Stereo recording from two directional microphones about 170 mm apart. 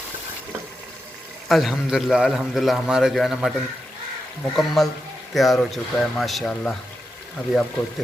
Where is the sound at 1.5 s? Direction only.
Centre (ahead or behind).